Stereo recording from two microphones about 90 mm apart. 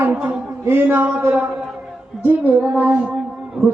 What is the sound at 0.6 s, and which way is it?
Child singing, 25° right (ahead or behind).